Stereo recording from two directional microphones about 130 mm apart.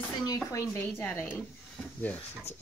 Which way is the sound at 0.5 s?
20° left (ahead or behind).